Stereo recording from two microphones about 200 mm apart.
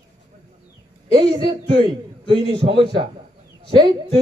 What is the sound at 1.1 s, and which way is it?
A man's voice, 25° right (ahead or behind).